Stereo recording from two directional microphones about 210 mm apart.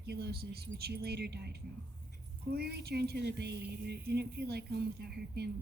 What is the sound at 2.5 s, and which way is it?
Speech, 50° right (ahead or behind).